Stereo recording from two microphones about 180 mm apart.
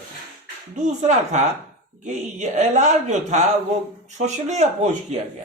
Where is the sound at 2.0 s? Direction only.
40° right (ahead or behind).